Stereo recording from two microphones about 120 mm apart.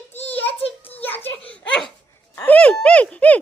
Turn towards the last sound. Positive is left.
turn(degrees=10)  # may be behind; listen again after turning